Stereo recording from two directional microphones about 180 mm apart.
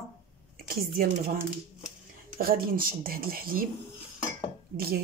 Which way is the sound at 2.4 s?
55° right (ahead or behind).